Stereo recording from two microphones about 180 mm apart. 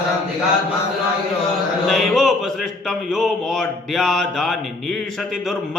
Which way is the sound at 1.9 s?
Centre (ahead or behind).